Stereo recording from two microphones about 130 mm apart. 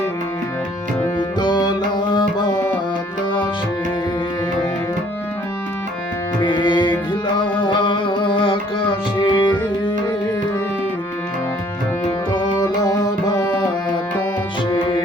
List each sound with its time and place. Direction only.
1.4 s music: 35° left (ahead or behind)
2.1 s tabla: 30° left (ahead or behind)
6.4 s music: 35° left (ahead or behind)
12.8 s tabla: 30° left (ahead or behind)
14.7 s music: 40° left (ahead or behind)